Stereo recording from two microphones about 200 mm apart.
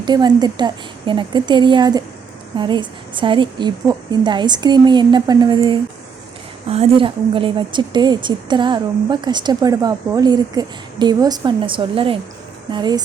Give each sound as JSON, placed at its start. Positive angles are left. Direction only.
{"t": 0.0, "sound": "a woman's voice", "side_deg": -20}